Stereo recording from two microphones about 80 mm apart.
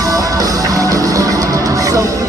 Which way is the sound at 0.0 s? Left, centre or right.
Right.